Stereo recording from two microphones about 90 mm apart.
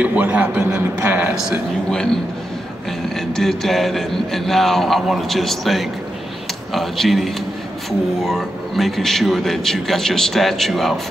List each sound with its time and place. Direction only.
0.0 s a man's voice: 15° right (ahead or behind)
0.9 s a sound: 20° right (ahead or behind)
1.3 s speech: 5° right (ahead or behind)
3.2 s a man's voice: 5° left (ahead or behind)